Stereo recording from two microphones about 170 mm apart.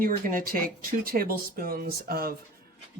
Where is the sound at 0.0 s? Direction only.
55° right (ahead or behind).